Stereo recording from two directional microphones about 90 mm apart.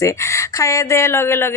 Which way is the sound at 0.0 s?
35° left (ahead or behind).